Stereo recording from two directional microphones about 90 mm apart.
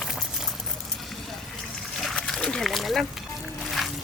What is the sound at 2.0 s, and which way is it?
Splash, 5° left (ahead or behind).